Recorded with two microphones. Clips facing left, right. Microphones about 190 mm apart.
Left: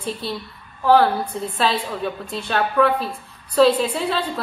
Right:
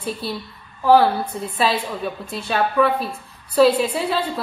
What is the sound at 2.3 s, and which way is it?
A woman's voice, 5° right (ahead or behind).